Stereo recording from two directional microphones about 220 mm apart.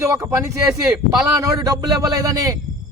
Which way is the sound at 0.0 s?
15° right (ahead or behind).